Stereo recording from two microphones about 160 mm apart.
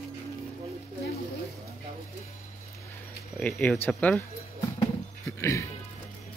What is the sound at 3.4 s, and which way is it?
Speech, 10° left (ahead or behind).